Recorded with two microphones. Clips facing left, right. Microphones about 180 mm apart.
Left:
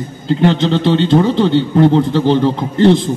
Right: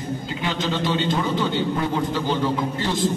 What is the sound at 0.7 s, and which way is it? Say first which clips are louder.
A man's voice: left 11 dB; 65° left (ahead or behind).